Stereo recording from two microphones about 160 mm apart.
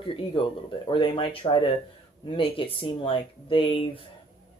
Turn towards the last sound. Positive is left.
turn(degrees=35)  # may be behind; listen again after turning